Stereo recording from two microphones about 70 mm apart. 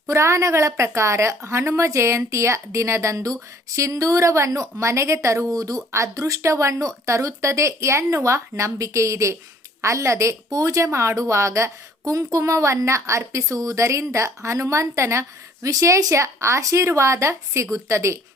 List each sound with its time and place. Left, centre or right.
0.1 s a woman's voice: right